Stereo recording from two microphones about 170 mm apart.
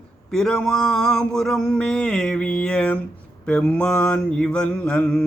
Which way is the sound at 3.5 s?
5° left (ahead or behind).